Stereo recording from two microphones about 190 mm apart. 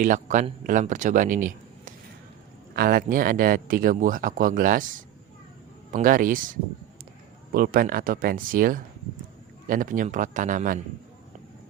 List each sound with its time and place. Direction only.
0.0 s speech: 40° right (ahead or behind)